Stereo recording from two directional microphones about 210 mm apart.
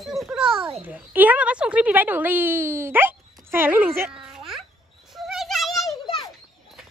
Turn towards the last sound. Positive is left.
turn(degrees=20)  # may be behind; listen again after turning